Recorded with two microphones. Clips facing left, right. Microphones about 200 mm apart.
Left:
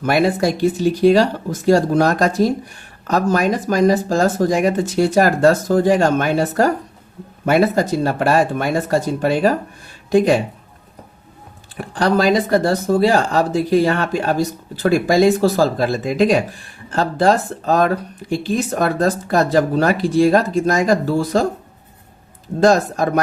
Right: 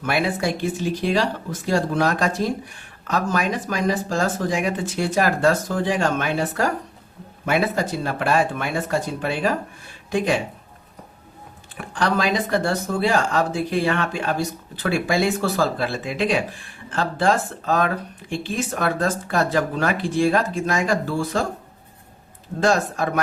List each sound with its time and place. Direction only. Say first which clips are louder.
0.0 s speech: left 6 dB; 40° left (ahead or behind)
11.8 s speech: left 6 dB; 35° left (ahead or behind)
22.6 s speech: left 6 dB; 40° left (ahead or behind)